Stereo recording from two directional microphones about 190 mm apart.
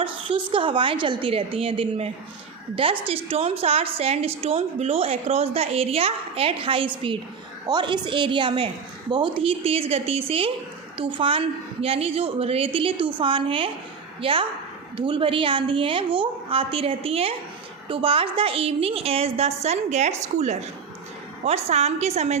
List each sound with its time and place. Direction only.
0.0 s a woman's voice: 25° right (ahead or behind)